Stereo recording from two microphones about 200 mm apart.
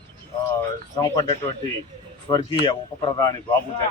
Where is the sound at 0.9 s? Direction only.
20° left (ahead or behind).